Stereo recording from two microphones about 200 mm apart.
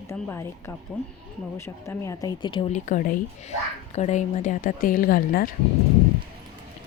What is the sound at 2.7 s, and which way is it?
A woman's voice, 40° left (ahead or behind).